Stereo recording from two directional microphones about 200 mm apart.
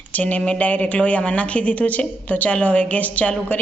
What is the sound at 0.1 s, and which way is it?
A woman's voice, 5° left (ahead or behind).